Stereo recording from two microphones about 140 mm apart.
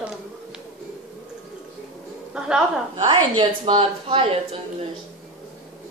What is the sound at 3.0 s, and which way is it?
Speech, 40° right (ahead or behind).